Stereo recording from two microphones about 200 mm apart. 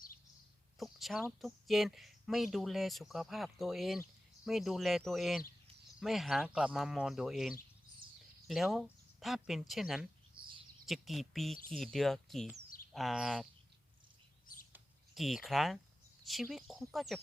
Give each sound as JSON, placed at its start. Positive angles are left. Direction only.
{"t": 0.8, "sound": "a sound", "side_deg": 0}
{"t": 1.4, "sound": "speech", "side_deg": 0}
{"t": 10.3, "sound": "a sound", "side_deg": -25}
{"t": 10.8, "sound": "speech", "side_deg": 0}
{"t": 14.4, "sound": "bird", "side_deg": 45}
{"t": 14.7, "sound": "bird", "side_deg": 0}
{"t": 16.2, "sound": "speech", "side_deg": 0}